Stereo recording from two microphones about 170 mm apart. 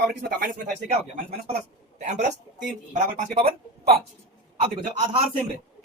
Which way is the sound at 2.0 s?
40° right (ahead or behind).